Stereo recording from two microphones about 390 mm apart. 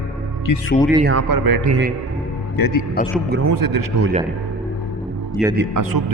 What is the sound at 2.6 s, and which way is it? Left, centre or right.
Speech, left.